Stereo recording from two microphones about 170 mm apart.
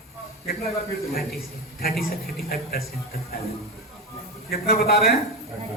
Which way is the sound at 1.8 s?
60° left (ahead or behind).